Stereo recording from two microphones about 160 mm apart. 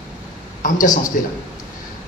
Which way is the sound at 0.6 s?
55° left (ahead or behind).